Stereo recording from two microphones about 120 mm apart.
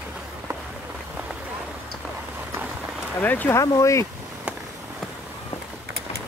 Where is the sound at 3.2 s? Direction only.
15° left (ahead or behind).